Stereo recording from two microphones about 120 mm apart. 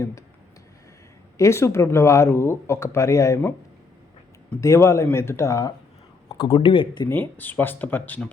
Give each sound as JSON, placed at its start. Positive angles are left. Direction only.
{"t": 0.0, "sound": "speech", "side_deg": 25}
{"t": 1.4, "sound": "speech", "side_deg": 25}
{"t": 4.6, "sound": "speech", "side_deg": 25}
{"t": 7.1, "sound": "speech", "side_deg": 15}